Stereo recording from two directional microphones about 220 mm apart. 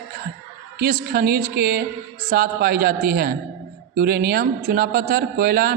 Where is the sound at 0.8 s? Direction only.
45° right (ahead or behind).